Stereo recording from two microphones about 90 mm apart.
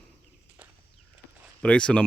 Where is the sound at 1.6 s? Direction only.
10° left (ahead or behind).